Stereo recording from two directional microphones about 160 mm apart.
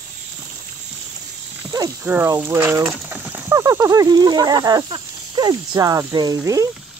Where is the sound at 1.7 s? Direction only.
15° right (ahead or behind).